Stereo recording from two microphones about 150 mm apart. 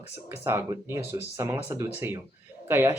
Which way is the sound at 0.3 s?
15° right (ahead or behind).